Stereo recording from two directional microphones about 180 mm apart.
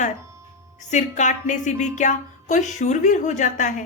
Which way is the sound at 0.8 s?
40° left (ahead or behind).